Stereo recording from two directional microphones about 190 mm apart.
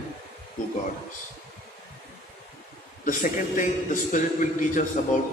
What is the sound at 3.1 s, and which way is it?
A man's voice, 45° left (ahead or behind).